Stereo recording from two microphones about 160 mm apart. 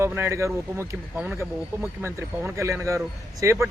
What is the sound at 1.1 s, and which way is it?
Speech, 5° right (ahead or behind).